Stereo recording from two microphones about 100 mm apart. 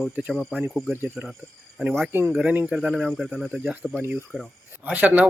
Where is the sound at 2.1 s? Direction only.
20° right (ahead or behind).